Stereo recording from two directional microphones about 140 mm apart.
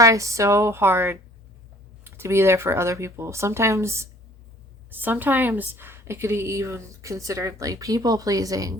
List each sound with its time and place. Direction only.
0.0 s a woman's voice: 20° right (ahead or behind)